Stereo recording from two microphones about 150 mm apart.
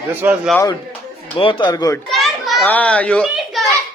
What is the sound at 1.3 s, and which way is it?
Speech, 35° left (ahead or behind).